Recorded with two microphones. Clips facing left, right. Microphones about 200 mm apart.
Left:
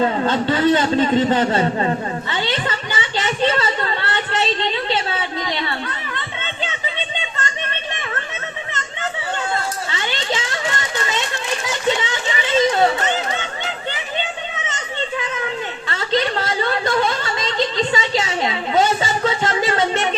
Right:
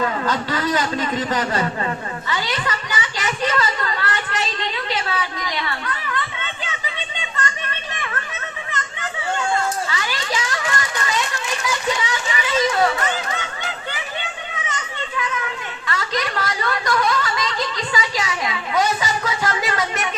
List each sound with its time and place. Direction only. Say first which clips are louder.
0.0 s a man's voice: left 4 dB; 25° left (ahead or behind)
7.2 s children playing: left 1 dB; 25° left (ahead or behind)
9.9 s a sound: left 2 dB; 25° left (ahead or behind)
13.9 s children playing: left 4 dB; 25° left (ahead or behind)